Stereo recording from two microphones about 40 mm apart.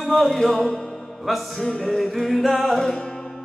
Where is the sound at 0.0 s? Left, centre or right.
Centre.